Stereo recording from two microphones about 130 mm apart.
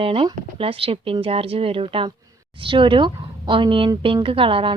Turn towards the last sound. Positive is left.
turn(degrees=-45)  # may be behind; listen again after turning